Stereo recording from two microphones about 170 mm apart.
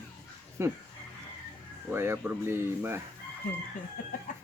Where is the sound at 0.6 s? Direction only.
15° right (ahead or behind).